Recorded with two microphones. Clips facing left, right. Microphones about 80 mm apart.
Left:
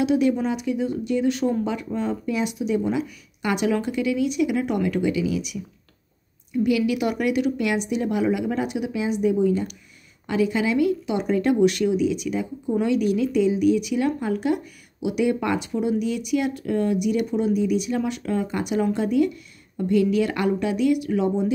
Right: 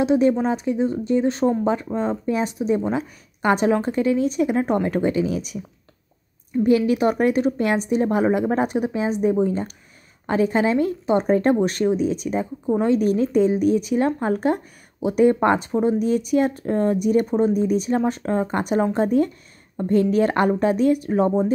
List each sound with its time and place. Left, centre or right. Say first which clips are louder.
0.0 s speech: right 3 dB; right